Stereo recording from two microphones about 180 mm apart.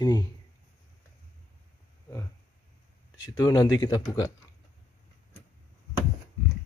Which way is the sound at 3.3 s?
20° left (ahead or behind).